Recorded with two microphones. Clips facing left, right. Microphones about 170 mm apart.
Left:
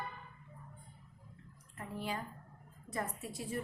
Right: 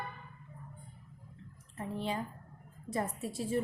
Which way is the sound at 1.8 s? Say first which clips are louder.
Right 4 dB; 25° right (ahead or behind).